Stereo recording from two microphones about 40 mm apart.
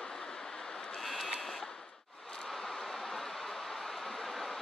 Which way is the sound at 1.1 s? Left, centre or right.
Centre.